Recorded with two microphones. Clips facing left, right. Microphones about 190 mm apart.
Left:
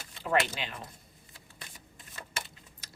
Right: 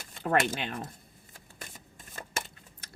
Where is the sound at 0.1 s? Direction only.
50° right (ahead or behind).